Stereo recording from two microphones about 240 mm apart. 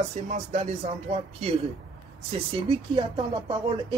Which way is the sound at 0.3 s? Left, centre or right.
Right.